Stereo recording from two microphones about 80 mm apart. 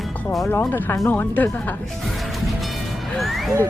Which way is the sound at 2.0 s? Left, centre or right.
Centre.